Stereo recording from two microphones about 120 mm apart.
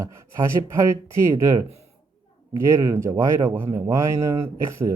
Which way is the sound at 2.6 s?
25° right (ahead or behind).